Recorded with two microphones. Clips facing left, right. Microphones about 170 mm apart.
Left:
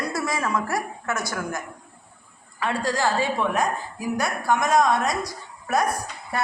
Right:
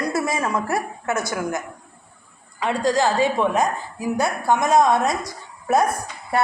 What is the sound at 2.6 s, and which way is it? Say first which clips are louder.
A woman's voice: right 4 dB; 20° right (ahead or behind).